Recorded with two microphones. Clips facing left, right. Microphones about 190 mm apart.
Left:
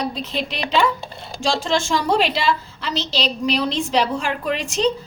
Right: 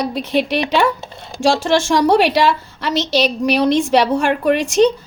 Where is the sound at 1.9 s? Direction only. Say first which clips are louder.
Right 7 dB; 70° right (ahead or behind).